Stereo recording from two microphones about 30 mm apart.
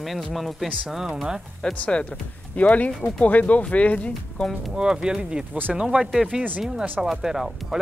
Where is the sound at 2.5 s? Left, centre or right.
Left.